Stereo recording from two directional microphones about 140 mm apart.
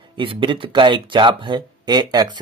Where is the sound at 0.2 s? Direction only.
35° right (ahead or behind).